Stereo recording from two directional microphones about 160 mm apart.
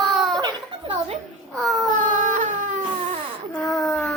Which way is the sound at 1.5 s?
Centre (ahead or behind).